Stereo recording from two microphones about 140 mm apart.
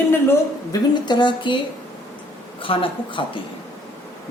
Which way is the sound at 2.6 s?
40° left (ahead or behind).